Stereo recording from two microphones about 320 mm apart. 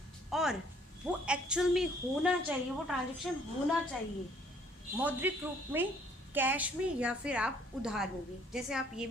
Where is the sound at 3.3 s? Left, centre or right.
Centre.